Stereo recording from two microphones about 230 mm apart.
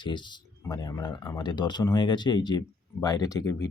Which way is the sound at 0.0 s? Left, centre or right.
Centre.